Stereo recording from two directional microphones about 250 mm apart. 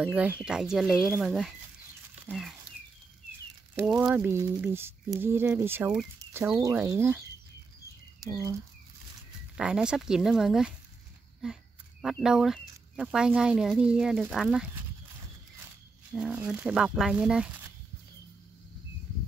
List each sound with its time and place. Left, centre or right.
0.0 s speech: centre
2.2 s a sound: centre
3.7 s speech: centre
8.2 s speech: centre
9.6 s speech: centre
16.1 s speech: centre